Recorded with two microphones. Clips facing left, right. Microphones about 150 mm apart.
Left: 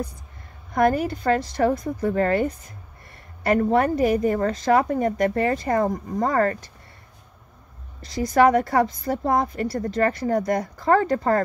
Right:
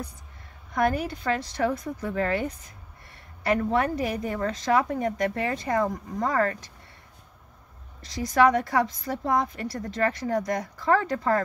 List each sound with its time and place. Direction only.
0.7 s a woman's voice: 45° left (ahead or behind)
8.3 s a woman's voice: 40° left (ahead or behind)